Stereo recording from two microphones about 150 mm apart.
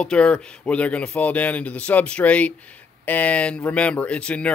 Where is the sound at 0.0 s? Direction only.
5° left (ahead or behind).